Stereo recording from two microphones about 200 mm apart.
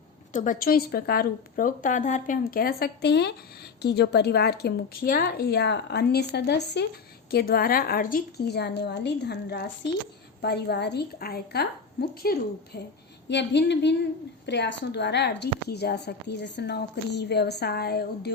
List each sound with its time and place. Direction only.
0.3 s a woman's voice: 45° left (ahead or behind)
13.2 s speech: 60° left (ahead or behind)